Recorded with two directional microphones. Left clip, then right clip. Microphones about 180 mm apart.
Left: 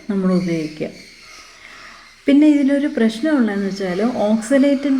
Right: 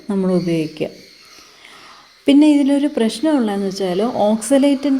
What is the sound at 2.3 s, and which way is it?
Speech, 30° right (ahead or behind).